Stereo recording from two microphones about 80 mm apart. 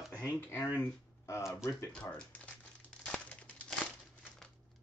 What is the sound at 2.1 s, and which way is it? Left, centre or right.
Crumpling, centre.